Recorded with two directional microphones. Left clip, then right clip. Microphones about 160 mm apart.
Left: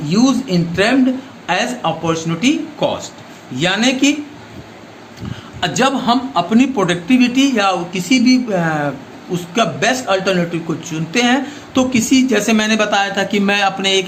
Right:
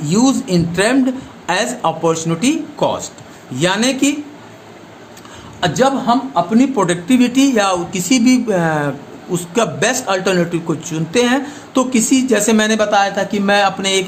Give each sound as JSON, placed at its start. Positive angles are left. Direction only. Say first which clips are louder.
{"t": 0.1, "sound": "speech", "louder": "right 1 dB", "side_deg": -35}
{"t": 5.5, "sound": "a man's voice", "louder": "right 1 dB", "side_deg": -15}
{"t": 6.7, "sound": "a woman's voice", "louder": "even", "side_deg": -25}